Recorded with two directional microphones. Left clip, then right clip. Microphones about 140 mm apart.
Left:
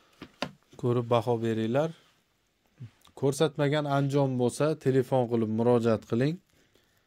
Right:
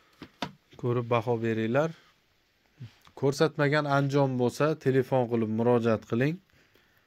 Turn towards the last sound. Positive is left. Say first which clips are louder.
# even
turn(degrees=20)  # may be behind; listen again after turning